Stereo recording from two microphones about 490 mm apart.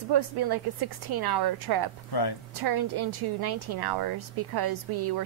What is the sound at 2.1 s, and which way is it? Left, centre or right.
Speech, left.